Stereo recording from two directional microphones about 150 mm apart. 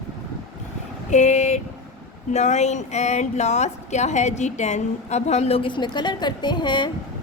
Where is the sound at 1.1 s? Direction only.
50° left (ahead or behind); by 6.9 s 30° left (ahead or behind).